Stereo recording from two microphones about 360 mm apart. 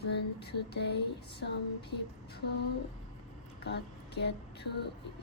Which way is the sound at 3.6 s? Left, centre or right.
Left.